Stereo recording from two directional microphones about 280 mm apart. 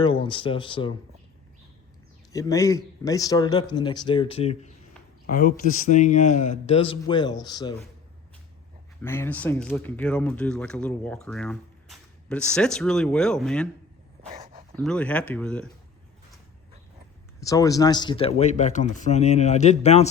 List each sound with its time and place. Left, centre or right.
0.0 s speech: centre
2.3 s speech: centre
9.0 s speech: centre
14.3 s dog: right
14.8 s speech: centre
17.4 s speech: centre